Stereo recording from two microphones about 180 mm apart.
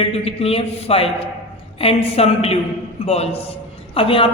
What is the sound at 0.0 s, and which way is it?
A woman's voice, 30° left (ahead or behind).